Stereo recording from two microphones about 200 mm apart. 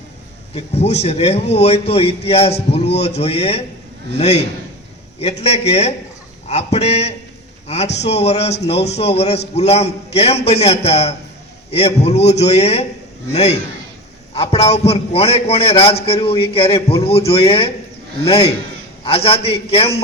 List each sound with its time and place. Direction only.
0.5 s a man's voice: 30° left (ahead or behind)
14.3 s a man's voice: 30° left (ahead or behind)